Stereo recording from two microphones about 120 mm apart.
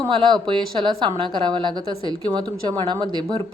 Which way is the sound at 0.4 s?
40° right (ahead or behind).